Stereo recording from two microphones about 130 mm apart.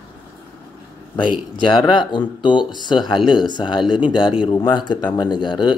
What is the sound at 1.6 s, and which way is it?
Speech, 35° left (ahead or behind).